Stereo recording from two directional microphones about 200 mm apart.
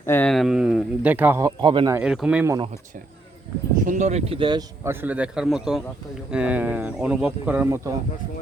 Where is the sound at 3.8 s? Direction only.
35° right (ahead or behind); by 7.9 s 10° right (ahead or behind).